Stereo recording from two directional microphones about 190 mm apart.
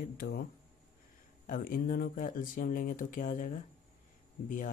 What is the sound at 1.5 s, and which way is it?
Speech, 45° left (ahead or behind).